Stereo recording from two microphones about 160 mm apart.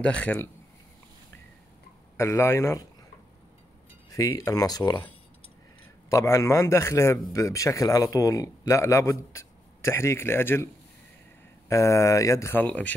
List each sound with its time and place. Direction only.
0.0 s a man's voice: 5° left (ahead or behind)
2.1 s a man's voice: 15° left (ahead or behind)
4.1 s a man's voice: 20° left (ahead or behind)
6.0 s a man's voice: 20° left (ahead or behind)
11.7 s a man's voice: 20° left (ahead or behind)